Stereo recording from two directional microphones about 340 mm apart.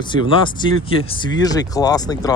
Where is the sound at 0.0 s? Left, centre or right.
Centre.